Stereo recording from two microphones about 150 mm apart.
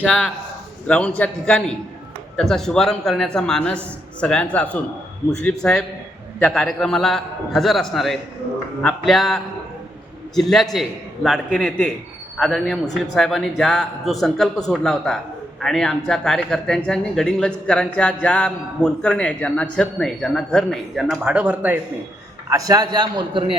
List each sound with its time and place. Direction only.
0.0 s a man's voice: 5° right (ahead or behind)
0.9 s a man's voice: 10° left (ahead or behind); by 21.8 s 10° right (ahead or behind)
22.4 s a man's voice: 25° right (ahead or behind)